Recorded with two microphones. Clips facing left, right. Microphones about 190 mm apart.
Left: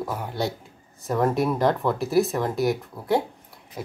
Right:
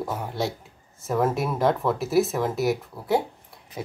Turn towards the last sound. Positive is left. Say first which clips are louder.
# right 1 dB
turn(degrees=0)  # may be behind; listen again after turning